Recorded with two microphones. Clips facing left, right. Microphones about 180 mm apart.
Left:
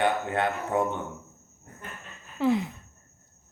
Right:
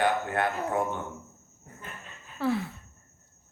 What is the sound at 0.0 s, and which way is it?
Speech, 25° left (ahead or behind).